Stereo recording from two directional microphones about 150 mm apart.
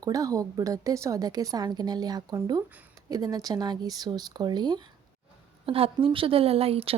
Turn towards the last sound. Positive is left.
turn(degrees=-40)  # may be behind; listen again after turning